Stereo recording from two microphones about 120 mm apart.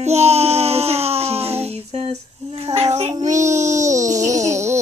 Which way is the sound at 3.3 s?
85° right.